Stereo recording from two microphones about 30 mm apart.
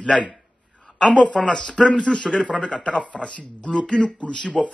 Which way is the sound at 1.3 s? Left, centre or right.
Left.